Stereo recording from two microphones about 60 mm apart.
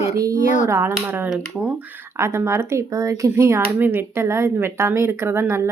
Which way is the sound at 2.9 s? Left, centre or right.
Right.